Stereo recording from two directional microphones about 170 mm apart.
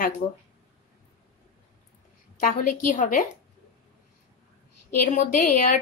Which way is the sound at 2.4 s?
50° left (ahead or behind).